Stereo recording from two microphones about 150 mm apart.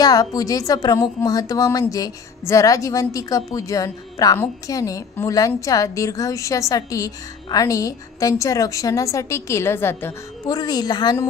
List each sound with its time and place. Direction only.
0.0 s a woman's voice: 25° left (ahead or behind)
10.5 s a woman's voice: 25° left (ahead or behind)